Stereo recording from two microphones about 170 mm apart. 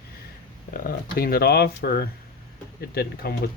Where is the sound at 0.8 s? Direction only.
60° left (ahead or behind).